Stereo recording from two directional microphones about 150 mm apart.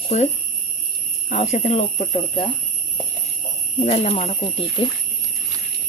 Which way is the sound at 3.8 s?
45° left (ahead or behind).